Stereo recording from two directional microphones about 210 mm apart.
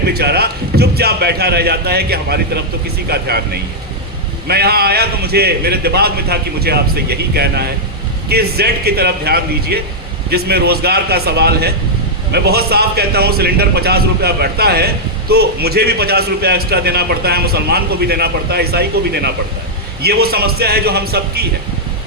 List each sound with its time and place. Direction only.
0.0 s a man's voice: 50° right (ahead or behind)